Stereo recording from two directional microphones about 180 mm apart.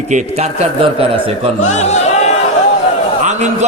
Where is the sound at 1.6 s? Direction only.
40° left (ahead or behind).